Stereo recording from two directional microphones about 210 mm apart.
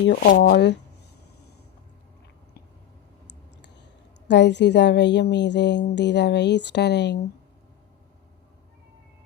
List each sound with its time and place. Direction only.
0.0 s speech: 50° left (ahead or behind)
4.3 s a woman's voice: 55° left (ahead or behind)